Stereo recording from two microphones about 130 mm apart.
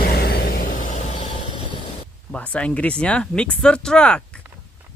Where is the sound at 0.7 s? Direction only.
85° left; by 1.3 s 70° left (ahead or behind).